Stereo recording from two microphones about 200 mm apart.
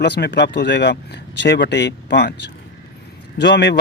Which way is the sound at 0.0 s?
60° left (ahead or behind).